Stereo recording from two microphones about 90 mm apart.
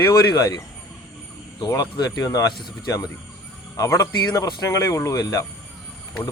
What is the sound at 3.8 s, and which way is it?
Speech, 35° left (ahead or behind).